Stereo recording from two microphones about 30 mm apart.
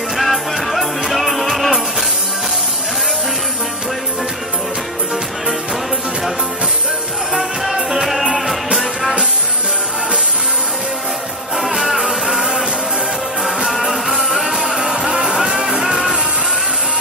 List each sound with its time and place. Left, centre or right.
0.2 s music: centre
7.3 s music: centre
11.7 s music: centre
14.0 s music: centre
15.0 s music: right